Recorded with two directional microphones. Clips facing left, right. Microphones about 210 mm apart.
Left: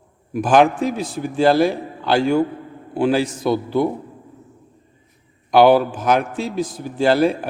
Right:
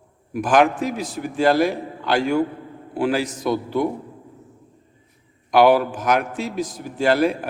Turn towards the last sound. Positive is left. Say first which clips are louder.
# left 2 dB
turn(degrees=30)  # may be behind; listen again after turning